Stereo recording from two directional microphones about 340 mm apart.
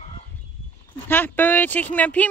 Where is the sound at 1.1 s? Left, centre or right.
Centre.